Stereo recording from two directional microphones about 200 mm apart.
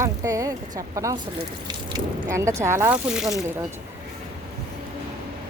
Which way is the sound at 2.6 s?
15° right (ahead or behind).